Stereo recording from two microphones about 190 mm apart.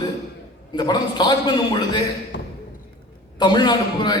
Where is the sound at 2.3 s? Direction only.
70° left (ahead or behind).